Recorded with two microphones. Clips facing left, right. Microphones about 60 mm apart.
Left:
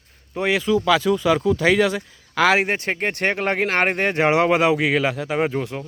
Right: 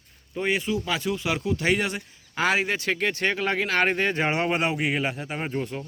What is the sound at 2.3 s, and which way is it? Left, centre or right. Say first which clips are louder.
Speech: left 6 dB; left.